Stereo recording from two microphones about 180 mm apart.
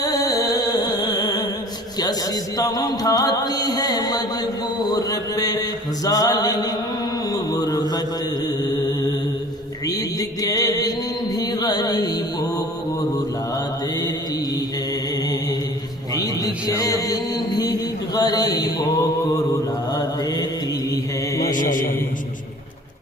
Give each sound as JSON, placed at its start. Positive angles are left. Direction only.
{"t": 0.0, "sound": "music", "side_deg": 20}
{"t": 2.0, "sound": "a man's voice", "side_deg": 20}
{"t": 7.3, "sound": "mantra", "side_deg": 20}
{"t": 11.3, "sound": "chant", "side_deg": 20}
{"t": 16.2, "sound": "music", "side_deg": 20}
{"t": 19.9, "sound": "mantra", "side_deg": 20}
{"t": 21.5, "sound": "a sound", "side_deg": 45}